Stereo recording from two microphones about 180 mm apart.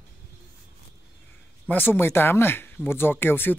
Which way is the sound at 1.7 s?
10° left (ahead or behind).